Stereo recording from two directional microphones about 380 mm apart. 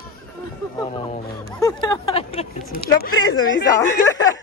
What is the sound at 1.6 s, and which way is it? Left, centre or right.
Speech, centre.